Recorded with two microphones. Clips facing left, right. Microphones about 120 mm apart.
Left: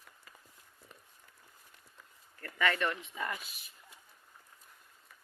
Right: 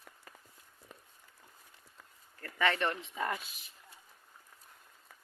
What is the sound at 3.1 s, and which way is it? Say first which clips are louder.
Speech: right 3 dB; 40° right (ahead or behind).